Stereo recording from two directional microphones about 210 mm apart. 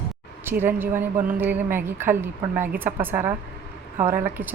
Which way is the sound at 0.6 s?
10° right (ahead or behind).